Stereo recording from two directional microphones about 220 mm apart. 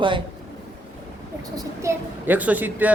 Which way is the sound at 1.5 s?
15° right (ahead or behind).